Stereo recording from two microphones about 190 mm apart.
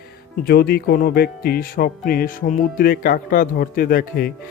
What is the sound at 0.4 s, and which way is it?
Speech, 55° left (ahead or behind).